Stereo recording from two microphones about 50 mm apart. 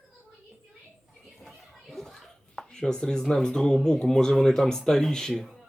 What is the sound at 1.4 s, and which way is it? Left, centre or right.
Children playing, centre.